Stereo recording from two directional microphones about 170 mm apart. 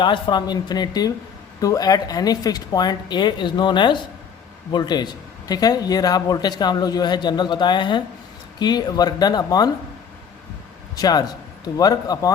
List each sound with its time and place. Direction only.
0.0 s a man's voice: 25° left (ahead or behind)
10.9 s a man's voice: 20° left (ahead or behind)